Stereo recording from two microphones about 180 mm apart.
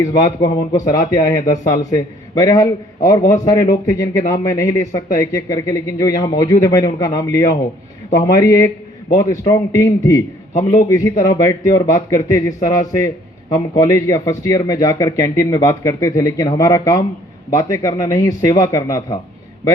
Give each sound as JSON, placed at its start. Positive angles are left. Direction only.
{"t": 0.0, "sound": "speech", "side_deg": 20}